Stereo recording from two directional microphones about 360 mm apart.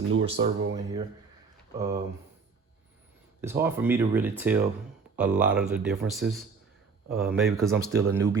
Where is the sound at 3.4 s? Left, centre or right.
Centre.